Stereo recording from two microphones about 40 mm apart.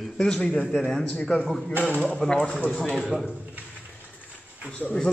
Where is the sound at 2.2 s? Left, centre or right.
Centre.